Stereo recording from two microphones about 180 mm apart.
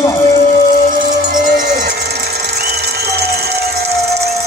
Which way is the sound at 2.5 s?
65° right (ahead or behind).